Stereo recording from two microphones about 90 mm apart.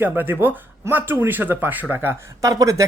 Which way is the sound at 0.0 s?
25° right (ahead or behind).